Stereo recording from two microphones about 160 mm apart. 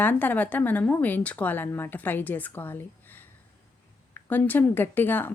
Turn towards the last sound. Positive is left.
turn(degrees=10)  # may be behind; listen again after turning